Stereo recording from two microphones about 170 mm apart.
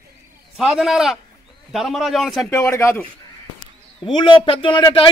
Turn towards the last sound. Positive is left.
turn(degrees=30)  # may be behind; listen again after turning